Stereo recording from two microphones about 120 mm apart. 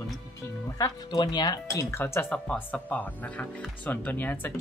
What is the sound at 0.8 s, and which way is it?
Speech, 35° left (ahead or behind).